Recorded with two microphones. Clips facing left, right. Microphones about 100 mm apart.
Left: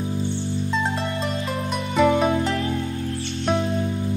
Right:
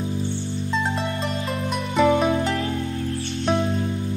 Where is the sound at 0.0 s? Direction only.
15° left (ahead or behind).